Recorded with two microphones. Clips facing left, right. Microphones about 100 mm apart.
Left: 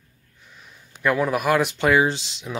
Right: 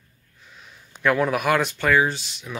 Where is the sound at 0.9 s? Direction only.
5° left (ahead or behind).